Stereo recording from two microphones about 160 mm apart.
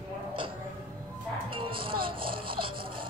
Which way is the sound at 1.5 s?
35° right (ahead or behind).